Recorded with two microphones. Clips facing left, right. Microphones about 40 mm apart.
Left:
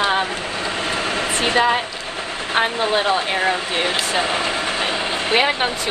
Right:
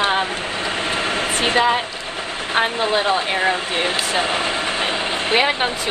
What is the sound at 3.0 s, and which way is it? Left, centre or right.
Speech, right.